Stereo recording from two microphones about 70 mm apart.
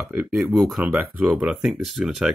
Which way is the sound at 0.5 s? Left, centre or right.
Centre.